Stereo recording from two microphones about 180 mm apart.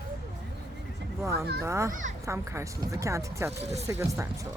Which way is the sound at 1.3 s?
60° right (ahead or behind).